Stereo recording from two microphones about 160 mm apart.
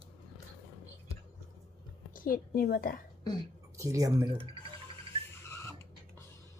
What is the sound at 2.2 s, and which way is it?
Speech, 65° left (ahead or behind).